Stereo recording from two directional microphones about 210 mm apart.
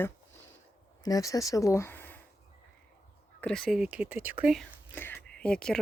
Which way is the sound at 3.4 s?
Centre (ahead or behind).